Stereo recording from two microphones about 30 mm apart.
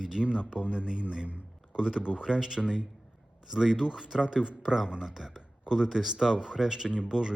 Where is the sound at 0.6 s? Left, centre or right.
Right.